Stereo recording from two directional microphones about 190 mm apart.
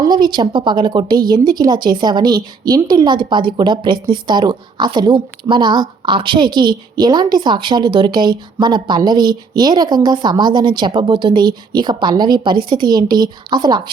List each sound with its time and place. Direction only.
0.0 s a woman's voice: 20° right (ahead or behind)